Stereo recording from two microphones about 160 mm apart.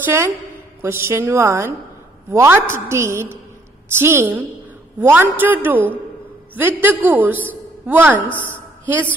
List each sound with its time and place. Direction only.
0.0 s a woman's voice: 15° right (ahead or behind)